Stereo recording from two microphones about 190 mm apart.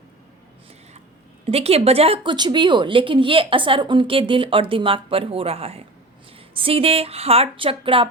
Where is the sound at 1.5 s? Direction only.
30° right (ahead or behind).